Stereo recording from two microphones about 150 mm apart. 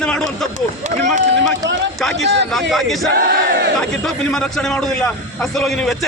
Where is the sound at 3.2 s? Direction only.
90° right.